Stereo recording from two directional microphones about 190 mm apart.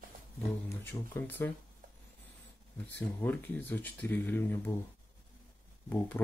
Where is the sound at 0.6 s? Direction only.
10° left (ahead or behind).